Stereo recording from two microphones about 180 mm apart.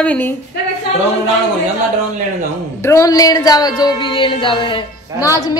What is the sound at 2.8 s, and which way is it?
Speech, 15° left (ahead or behind).